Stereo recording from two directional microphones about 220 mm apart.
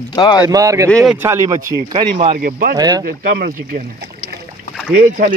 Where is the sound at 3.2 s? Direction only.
45° right (ahead or behind).